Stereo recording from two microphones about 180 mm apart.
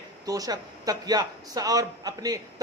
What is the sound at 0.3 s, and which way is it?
A man's voice, 20° right (ahead or behind).